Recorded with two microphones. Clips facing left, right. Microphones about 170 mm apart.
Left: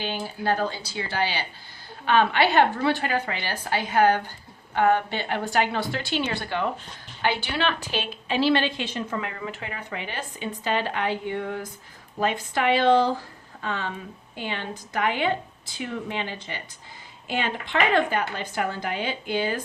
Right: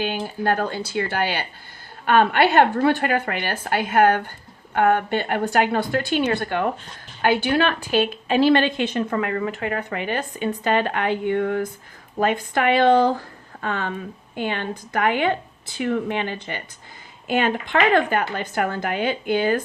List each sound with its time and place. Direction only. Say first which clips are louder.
0.0 s a woman's voice: right 4 dB; 50° right (ahead or behind)